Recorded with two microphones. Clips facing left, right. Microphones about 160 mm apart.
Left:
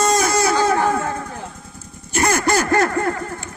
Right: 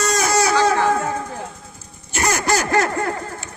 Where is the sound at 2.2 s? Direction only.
50° left (ahead or behind).